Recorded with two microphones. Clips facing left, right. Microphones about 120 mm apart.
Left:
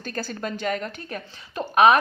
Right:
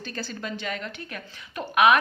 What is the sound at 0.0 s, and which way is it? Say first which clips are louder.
A woman's voice: left 4 dB; 45° left (ahead or behind).